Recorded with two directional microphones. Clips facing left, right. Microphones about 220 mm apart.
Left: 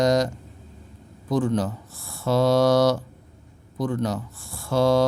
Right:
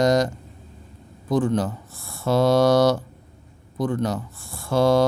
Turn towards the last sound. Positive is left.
turn(degrees=-50)  # may be behind; listen again after turning